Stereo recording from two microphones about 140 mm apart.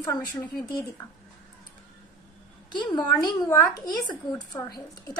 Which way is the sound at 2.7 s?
30° left (ahead or behind).